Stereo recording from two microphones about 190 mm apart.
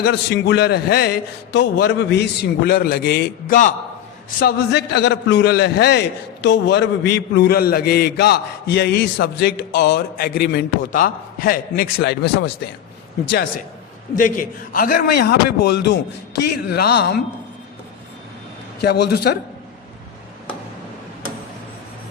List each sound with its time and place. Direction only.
0.0 s a man's voice: 60° left (ahead or behind); by 3.8 s 45° left (ahead or behind)
4.4 s a man's voice: 55° left (ahead or behind)
14.2 s a man's voice: 45° left (ahead or behind)
18.8 s a man's voice: 60° left (ahead or behind)